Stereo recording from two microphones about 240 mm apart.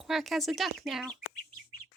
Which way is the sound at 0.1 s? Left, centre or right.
Centre.